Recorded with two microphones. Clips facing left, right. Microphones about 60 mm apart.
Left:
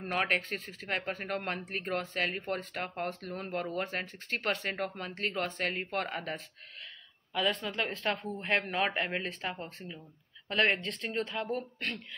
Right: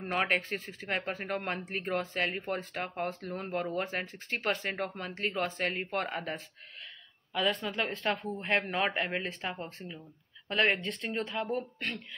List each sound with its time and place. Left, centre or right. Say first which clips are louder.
0.0 s speech: right 1 dB; centre